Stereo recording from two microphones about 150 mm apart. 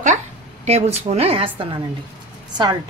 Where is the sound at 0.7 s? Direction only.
45° right (ahead or behind).